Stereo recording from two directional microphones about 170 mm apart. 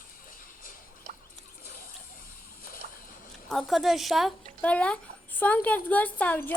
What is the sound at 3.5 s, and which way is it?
Speech, centre (ahead or behind).